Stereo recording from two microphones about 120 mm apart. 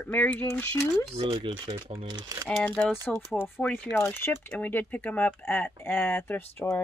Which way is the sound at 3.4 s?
15° left (ahead or behind).